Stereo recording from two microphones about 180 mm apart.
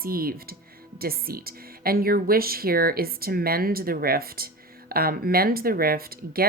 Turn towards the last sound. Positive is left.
turn(degrees=-55)  # may be behind; listen again after turning